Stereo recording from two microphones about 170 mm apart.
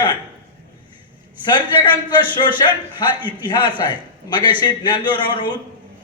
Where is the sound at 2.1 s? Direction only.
25° left (ahead or behind).